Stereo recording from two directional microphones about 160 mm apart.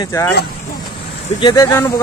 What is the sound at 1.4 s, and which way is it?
Speech, 20° left (ahead or behind).